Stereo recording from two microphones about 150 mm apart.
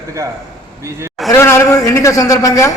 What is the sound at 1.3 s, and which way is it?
A man's voice, 20° left (ahead or behind).